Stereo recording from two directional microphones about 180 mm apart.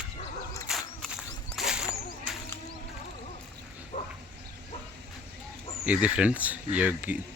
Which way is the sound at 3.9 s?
40° left (ahead or behind).